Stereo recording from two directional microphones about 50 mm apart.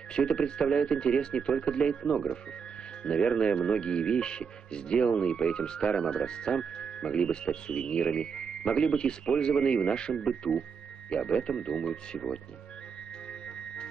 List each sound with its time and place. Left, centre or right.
0.1 s speech: centre